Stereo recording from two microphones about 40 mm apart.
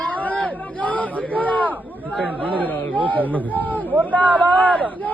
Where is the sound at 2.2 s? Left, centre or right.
Right.